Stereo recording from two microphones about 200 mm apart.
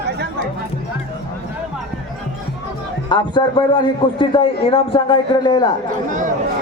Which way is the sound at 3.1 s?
20° left (ahead or behind).